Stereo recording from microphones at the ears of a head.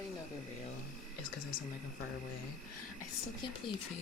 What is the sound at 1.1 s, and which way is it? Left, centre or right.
Speech, left.